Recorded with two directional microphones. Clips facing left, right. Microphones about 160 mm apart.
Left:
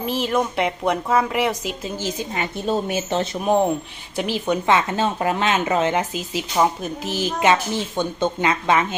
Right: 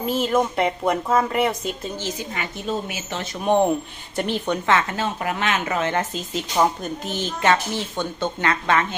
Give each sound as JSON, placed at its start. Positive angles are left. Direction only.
{"t": 0.0, "sound": "speech", "side_deg": 0}
{"t": 2.3, "sound": "a woman's voice", "side_deg": 30}
{"t": 3.4, "sound": "speech", "side_deg": 5}
{"t": 4.6, "sound": "speech", "side_deg": 20}
{"t": 5.9, "sound": "speech", "side_deg": 10}
{"t": 7.3, "sound": "a woman's voice", "side_deg": 15}